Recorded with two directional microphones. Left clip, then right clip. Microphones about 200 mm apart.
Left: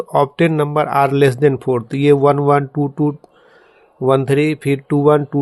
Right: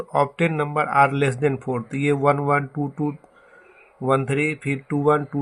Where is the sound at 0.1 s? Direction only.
45° left (ahead or behind).